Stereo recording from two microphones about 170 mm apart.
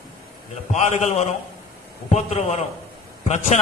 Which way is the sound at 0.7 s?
45° left (ahead or behind).